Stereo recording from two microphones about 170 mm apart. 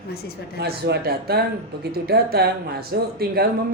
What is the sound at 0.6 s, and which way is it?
Speech, 65° right (ahead or behind).